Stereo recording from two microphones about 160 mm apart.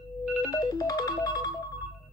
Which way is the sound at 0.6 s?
25° left (ahead or behind).